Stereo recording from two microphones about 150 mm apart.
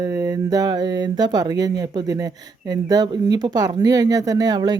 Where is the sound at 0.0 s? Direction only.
25° right (ahead or behind).